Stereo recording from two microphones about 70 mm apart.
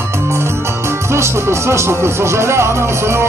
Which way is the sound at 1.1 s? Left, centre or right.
Right.